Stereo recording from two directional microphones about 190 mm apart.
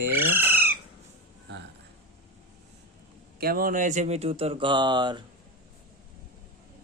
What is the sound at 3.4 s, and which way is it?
Speech, 50° right (ahead or behind).